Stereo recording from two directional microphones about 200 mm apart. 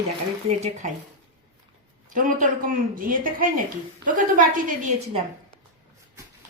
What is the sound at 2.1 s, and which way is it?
A woman's voice, 40° right (ahead or behind).